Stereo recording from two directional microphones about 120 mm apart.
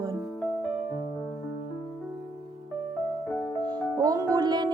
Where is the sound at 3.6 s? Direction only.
30° right (ahead or behind).